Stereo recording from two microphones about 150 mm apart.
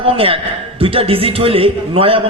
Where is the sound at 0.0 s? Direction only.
40° right (ahead or behind).